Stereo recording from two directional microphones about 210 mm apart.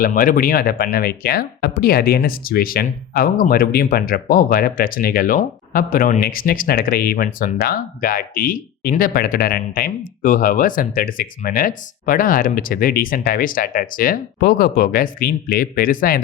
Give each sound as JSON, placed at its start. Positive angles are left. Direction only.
{"t": 0.0, "sound": "speech", "side_deg": 40}